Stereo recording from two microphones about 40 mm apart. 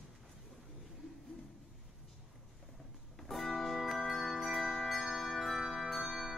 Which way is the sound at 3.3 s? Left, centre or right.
Centre.